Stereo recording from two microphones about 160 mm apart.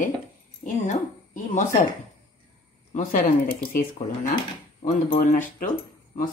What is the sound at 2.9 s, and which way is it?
Speech, 55° left (ahead or behind).